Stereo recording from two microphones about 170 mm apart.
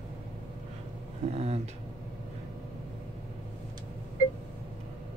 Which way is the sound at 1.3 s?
35° right (ahead or behind).